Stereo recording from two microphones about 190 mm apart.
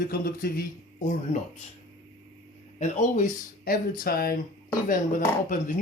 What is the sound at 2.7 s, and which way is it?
Speech, 40° left (ahead or behind).